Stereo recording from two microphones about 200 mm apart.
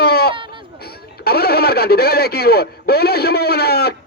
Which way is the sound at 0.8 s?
50° left (ahead or behind).